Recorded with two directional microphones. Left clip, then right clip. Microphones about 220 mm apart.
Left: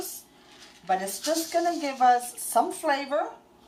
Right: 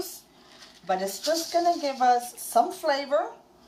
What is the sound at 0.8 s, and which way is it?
A woman's voice, 10° right (ahead or behind).